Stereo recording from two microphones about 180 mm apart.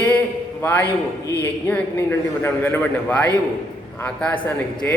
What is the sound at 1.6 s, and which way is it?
A man's voice, 10° left (ahead or behind).